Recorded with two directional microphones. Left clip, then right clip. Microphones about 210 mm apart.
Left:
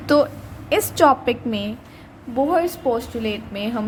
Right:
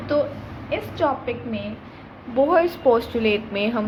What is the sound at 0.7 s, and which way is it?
Speech, 45° left (ahead or behind).